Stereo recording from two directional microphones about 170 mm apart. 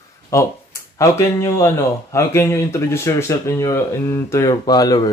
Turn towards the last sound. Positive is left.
turn(degrees=20)  # may be behind; listen again after turning